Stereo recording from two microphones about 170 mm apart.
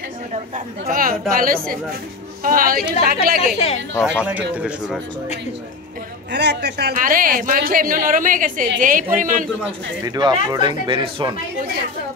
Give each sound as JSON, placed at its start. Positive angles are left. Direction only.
{"t": 0.8, "sound": "a woman's voice", "side_deg": -55}
{"t": 3.5, "sound": "speech", "side_deg": 35}
{"t": 4.0, "sound": "speech", "side_deg": -5}
{"t": 6.3, "sound": "speech", "side_deg": -80}
{"t": 10.0, "sound": "speech", "side_deg": -25}